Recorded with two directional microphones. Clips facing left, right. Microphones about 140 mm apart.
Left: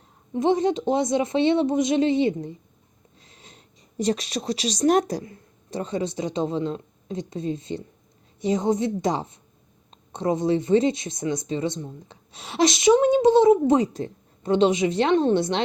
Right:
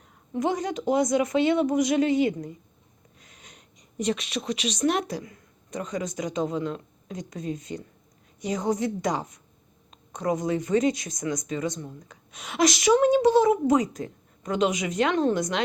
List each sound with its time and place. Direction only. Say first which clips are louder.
0.3 s speech: left 6 dB; 25° left (ahead or behind)